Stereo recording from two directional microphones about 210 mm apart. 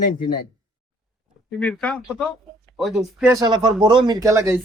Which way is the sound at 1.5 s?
5° left (ahead or behind).